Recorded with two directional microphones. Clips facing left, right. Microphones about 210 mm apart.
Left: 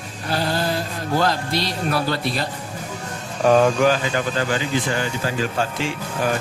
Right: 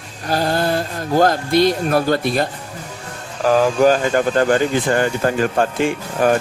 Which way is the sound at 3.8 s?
45° right (ahead or behind).